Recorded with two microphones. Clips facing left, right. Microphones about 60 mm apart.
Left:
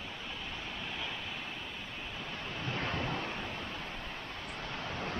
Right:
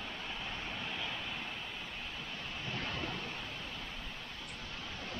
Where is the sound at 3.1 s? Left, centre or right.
Left.